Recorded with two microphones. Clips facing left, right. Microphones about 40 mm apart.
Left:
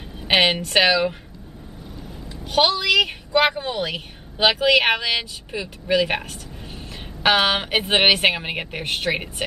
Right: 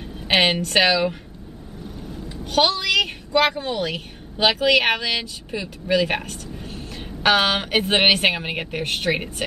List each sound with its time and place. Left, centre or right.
0.2 s a sound: centre
0.7 s a woman's voice: centre
2.4 s a woman's voice: centre